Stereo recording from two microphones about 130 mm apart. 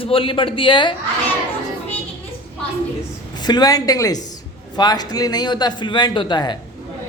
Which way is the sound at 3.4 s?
30° left (ahead or behind).